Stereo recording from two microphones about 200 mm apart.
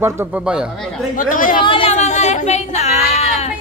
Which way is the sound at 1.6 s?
25° left (ahead or behind).